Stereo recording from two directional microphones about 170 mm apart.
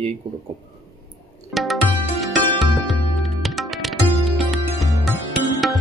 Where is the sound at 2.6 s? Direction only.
Centre (ahead or behind).